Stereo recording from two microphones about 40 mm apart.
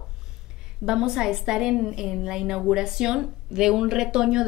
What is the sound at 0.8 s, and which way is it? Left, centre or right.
Speech, centre.